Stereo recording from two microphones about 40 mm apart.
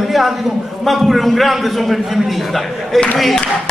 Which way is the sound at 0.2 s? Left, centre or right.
Centre.